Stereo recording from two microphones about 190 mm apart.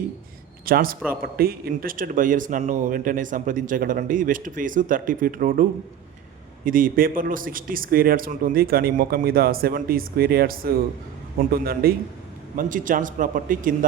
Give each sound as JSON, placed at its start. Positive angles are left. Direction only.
{"t": 0.6, "sound": "a man's voice", "side_deg": -50}
{"t": 6.7, "sound": "a man's voice", "side_deg": -45}
{"t": 12.5, "sound": "speech", "side_deg": -45}